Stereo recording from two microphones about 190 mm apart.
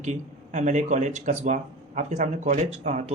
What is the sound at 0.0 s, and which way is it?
Speech, 40° right (ahead or behind).